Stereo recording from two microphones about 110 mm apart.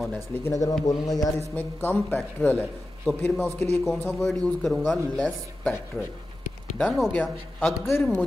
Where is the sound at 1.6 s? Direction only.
20° left (ahead or behind).